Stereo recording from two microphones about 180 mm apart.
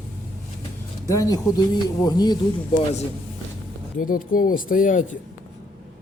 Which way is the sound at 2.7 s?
40° left (ahead or behind).